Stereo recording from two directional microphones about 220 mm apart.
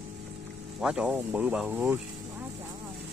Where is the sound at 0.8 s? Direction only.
5° right (ahead or behind).